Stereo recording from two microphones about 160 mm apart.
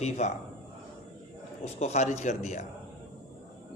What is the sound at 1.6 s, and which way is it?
A man's voice, 45° left (ahead or behind).